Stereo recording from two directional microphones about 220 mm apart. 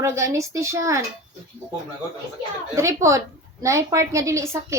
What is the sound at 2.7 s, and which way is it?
A woman's voice, 15° right (ahead or behind).